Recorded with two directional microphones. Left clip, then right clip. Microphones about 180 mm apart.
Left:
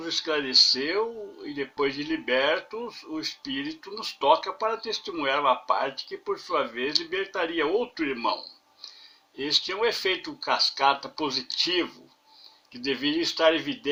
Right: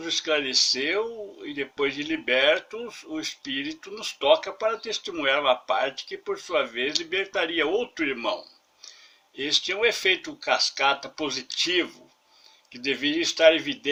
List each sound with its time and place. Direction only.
0.0 s speech: 30° right (ahead or behind)